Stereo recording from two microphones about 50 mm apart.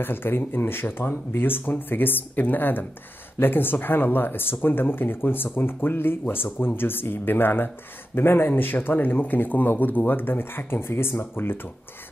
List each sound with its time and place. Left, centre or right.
0.0 s speech: left